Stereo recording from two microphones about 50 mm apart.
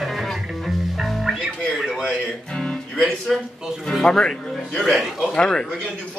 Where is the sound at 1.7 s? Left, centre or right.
Centre.